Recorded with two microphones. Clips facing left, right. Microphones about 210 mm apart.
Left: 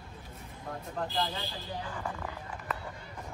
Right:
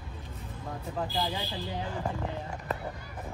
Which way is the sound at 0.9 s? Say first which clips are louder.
Right 1 dB; 5° right (ahead or behind).